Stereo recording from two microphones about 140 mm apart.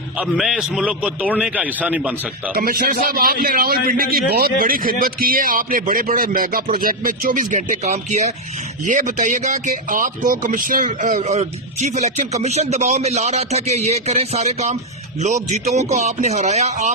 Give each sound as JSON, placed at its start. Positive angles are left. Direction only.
{"t": 0.2, "sound": "a man's voice", "side_deg": -5}
{"t": 2.6, "sound": "a man's voice", "side_deg": -90}
{"t": 8.8, "sound": "speech", "side_deg": -70}